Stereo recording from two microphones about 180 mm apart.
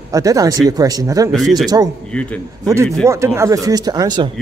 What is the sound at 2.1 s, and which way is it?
Speech, 5° left (ahead or behind).